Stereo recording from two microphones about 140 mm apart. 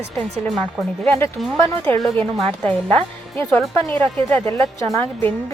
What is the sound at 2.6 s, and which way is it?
A woman's voice, 10° left (ahead or behind).